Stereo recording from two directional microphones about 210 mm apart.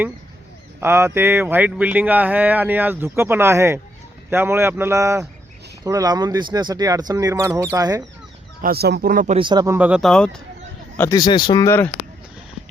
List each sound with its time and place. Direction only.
0.8 s speech: 10° right (ahead or behind)
8.6 s speech: 50° right (ahead or behind)
9.4 s speech: 20° right (ahead or behind)
9.7 s speech: 5° right (ahead or behind); by 11.9 s 10° left (ahead or behind)